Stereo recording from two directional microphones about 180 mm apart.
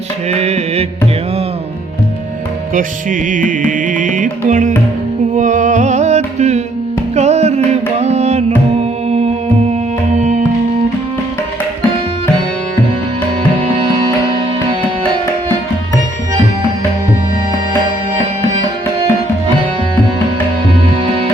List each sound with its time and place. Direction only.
0.3 s music: 35° right (ahead or behind)
2.7 s music: 50° right (ahead or behind)